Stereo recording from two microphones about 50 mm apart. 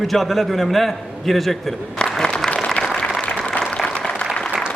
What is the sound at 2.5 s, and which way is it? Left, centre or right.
Applause, centre.